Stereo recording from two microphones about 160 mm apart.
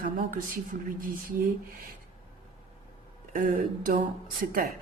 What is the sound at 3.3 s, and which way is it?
A woman's voice, 55° right (ahead or behind).